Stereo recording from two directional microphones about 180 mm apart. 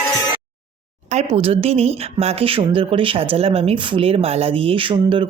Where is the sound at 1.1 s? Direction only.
35° right (ahead or behind).